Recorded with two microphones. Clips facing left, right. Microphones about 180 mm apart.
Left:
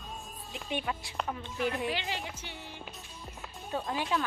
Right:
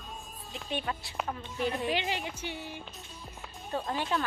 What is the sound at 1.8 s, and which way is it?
Speech, 15° right (ahead or behind).